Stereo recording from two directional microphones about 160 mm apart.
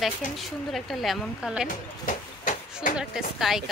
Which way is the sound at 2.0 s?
55° left (ahead or behind).